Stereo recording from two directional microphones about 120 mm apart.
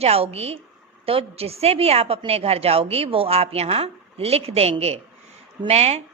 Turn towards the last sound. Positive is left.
turn(degrees=-60)  # may be behind; listen again after turning